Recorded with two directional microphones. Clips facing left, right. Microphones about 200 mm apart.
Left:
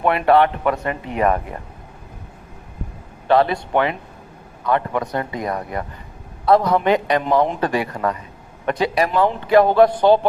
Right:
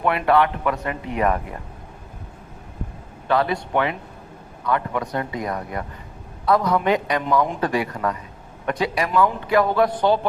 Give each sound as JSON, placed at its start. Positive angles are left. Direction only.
{"t": 0.0, "sound": "a man's voice", "side_deg": 35}
{"t": 3.2, "sound": "a man's voice", "side_deg": 30}